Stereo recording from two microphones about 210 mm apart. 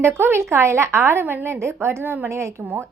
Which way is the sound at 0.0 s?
10° right (ahead or behind).